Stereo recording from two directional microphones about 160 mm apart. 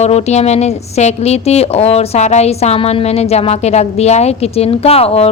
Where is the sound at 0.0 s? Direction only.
40° left (ahead or behind).